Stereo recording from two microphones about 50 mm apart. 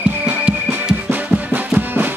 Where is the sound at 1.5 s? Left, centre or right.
Right.